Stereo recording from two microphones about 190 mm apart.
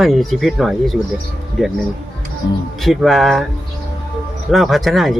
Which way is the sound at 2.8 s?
Centre (ahead or behind).